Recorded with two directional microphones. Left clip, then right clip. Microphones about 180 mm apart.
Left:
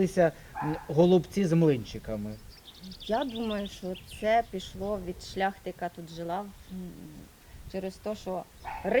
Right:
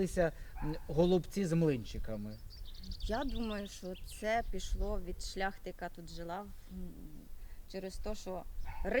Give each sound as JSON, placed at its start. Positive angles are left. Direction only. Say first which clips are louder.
{"t": 0.0, "sound": "speech", "louder": "left 8 dB", "side_deg": -30}
{"t": 4.2, "sound": "speech", "louder": "left 9 dB", "side_deg": -15}
{"t": 7.7, "sound": "speech", "louder": "left 8 dB", "side_deg": -15}